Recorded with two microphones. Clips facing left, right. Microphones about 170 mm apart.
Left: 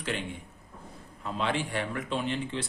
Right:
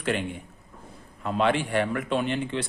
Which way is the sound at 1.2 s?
65° right (ahead or behind).